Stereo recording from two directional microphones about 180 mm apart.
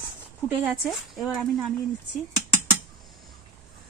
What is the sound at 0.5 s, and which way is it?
Speech, 5° right (ahead or behind).